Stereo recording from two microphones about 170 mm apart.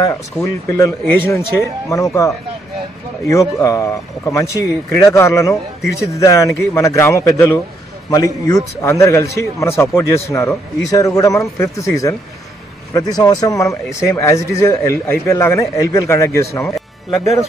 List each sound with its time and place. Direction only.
0.0 s a man's voice: 20° left (ahead or behind)